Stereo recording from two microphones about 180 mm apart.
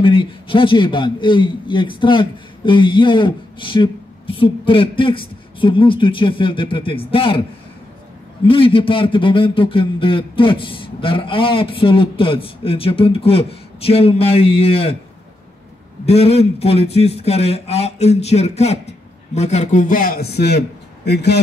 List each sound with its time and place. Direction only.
0.0 s a man's voice: 30° left (ahead or behind)
8.5 s a man's voice: 30° left (ahead or behind)
16.1 s a man's voice: 35° left (ahead or behind); by 21.4 s 65° left (ahead or behind)